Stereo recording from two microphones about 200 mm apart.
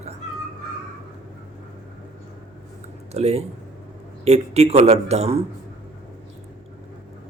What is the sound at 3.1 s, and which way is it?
A man's voice, 30° right (ahead or behind).